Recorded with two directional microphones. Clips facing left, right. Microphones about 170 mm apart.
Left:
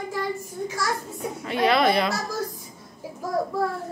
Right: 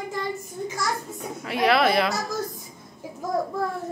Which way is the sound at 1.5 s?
Centre (ahead or behind).